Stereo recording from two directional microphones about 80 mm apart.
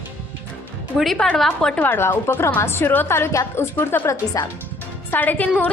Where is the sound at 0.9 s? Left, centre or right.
Centre.